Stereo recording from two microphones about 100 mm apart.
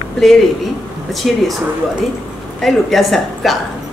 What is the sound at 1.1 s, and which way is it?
Speech, centre (ahead or behind).